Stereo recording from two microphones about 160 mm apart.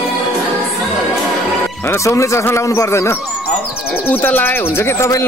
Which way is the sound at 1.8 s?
15° left (ahead or behind).